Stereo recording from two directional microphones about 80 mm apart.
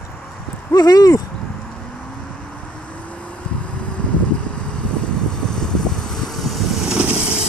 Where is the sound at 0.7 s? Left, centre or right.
Left.